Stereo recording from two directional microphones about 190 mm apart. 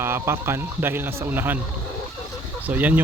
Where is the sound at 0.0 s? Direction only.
15° right (ahead or behind).